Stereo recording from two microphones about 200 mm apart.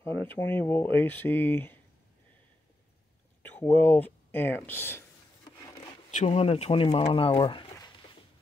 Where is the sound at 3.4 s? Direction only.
10° left (ahead or behind).